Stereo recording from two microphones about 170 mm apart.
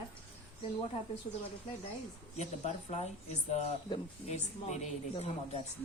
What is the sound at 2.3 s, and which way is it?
Speech, 40° left (ahead or behind).